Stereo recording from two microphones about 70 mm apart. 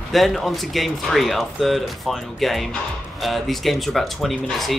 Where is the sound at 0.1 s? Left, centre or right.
Centre.